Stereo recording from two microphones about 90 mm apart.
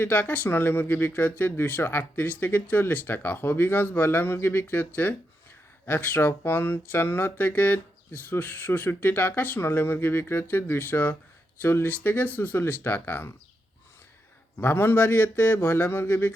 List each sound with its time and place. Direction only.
0.0 s speech: 20° left (ahead or behind)
14.6 s speech: 25° left (ahead or behind)